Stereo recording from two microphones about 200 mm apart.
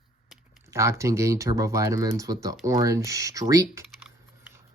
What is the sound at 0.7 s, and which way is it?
Speech, 15° right (ahead or behind).